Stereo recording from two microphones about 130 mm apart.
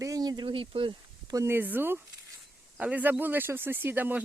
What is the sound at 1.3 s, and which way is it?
Speech, 20° right (ahead or behind).